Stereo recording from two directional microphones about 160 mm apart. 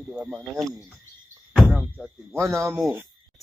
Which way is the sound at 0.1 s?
Centre (ahead or behind).